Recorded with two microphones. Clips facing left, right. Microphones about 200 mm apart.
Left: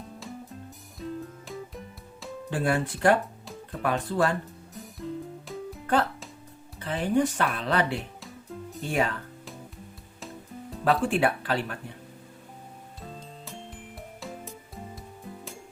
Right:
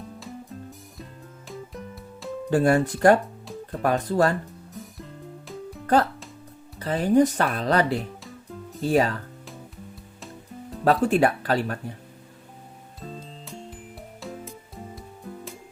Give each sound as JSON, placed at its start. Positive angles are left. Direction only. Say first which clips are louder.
{"t": 2.5, "sound": "speech", "louder": "right 7 dB", "side_deg": -40}
{"t": 5.8, "sound": "music", "louder": "right 5 dB", "side_deg": -40}
{"t": 6.7, "sound": "speech", "louder": "right 6 dB", "side_deg": -40}
{"t": 10.2, "sound": "music", "louder": "left 1 dB", "side_deg": 0}
{"t": 10.8, "sound": "speech", "louder": "right 4 dB", "side_deg": -40}
{"t": 13.0, "sound": "music", "louder": "right 5 dB", "side_deg": 0}